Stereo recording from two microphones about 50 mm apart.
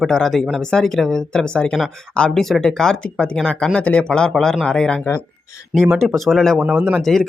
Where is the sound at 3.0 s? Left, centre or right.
Left.